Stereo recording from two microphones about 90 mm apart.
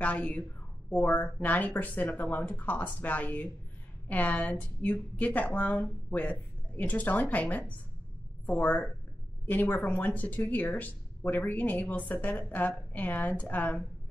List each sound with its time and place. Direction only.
0.0 s speech: 15° left (ahead or behind)